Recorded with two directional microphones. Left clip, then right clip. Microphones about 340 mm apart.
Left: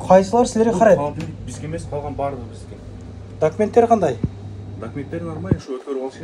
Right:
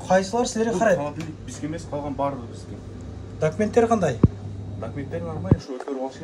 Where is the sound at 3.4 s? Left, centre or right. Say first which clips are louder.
Left 5 dB; centre.